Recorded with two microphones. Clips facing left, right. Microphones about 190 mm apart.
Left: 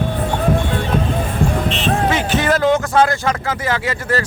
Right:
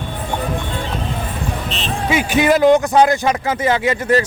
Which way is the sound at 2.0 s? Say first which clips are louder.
Right 6 dB; 10° right (ahead or behind).